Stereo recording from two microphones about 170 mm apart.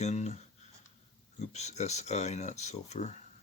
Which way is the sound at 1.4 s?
40° left (ahead or behind).